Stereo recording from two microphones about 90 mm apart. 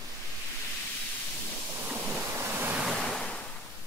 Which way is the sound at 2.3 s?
25° right (ahead or behind).